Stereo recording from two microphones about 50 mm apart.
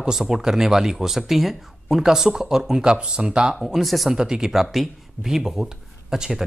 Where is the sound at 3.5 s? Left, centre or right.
Centre.